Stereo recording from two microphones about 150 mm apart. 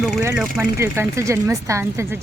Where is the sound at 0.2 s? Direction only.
15° right (ahead or behind).